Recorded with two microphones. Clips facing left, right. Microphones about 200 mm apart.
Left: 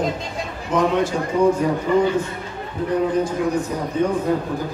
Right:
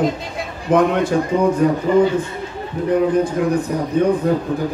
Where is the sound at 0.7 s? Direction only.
55° right (ahead or behind).